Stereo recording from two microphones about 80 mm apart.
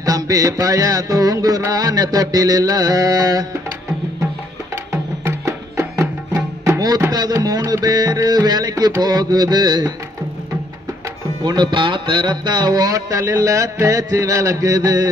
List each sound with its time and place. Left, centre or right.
0.0 s music: right
4.9 s music: right
7.1 s music: right
11.4 s music: right